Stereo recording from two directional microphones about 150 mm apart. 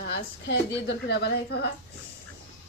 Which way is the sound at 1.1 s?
90° left.